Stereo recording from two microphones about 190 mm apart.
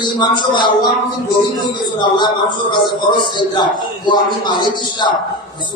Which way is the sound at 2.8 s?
25° left (ahead or behind).